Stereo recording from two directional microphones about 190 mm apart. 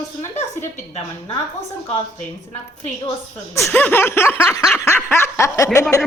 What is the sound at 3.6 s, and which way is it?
Snicker, 10° left (ahead or behind).